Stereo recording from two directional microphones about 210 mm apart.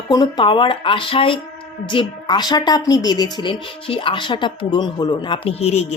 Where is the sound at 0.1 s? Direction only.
20° left (ahead or behind).